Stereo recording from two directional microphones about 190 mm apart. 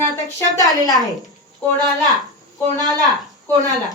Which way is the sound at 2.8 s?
20° right (ahead or behind).